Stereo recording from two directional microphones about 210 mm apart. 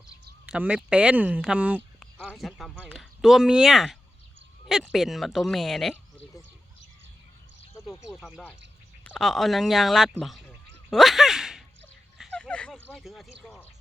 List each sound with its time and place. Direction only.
0.4 s speech: 5° right (ahead or behind)
8.1 s speech: centre (ahead or behind)
10.8 s a sound: centre (ahead or behind)
12.1 s speech: 5° left (ahead or behind)